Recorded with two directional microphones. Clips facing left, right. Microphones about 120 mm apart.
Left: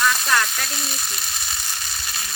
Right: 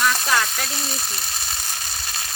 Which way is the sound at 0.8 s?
35° right (ahead or behind).